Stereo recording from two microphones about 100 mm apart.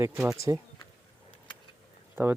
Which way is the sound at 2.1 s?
20° right (ahead or behind).